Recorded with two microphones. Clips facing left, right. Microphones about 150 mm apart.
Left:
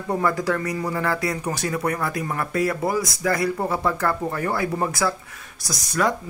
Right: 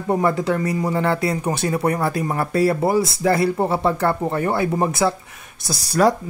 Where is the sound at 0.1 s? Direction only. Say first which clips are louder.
Right 3 dB; 25° right (ahead or behind).